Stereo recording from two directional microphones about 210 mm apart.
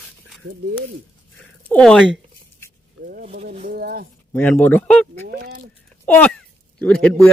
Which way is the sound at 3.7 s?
45° right (ahead or behind).